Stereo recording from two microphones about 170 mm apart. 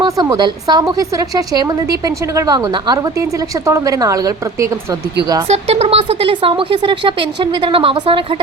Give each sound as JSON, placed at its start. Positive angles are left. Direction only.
{"t": 0.0, "sound": "a woman's voice", "side_deg": -25}
{"t": 5.5, "sound": "speech", "side_deg": -40}